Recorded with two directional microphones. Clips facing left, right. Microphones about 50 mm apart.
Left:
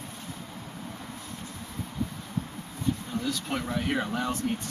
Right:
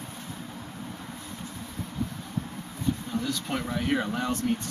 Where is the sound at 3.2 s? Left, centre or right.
Centre.